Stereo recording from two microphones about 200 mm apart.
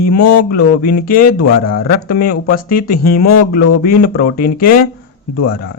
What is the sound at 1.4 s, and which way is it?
Speech, 90° left.